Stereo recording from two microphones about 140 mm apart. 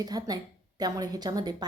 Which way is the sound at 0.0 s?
25° right (ahead or behind).